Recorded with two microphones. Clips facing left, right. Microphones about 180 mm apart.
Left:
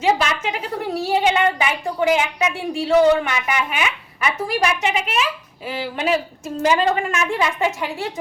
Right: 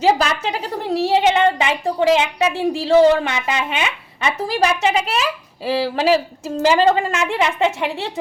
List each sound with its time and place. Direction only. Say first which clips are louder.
0.0 s a woman's voice: right 2 dB; 35° right (ahead or behind)
1.1 s a woman's voice: right 2 dB; 25° right (ahead or behind)